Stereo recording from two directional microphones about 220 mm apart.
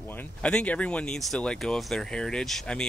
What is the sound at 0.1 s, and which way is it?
Speech, 5° left (ahead or behind).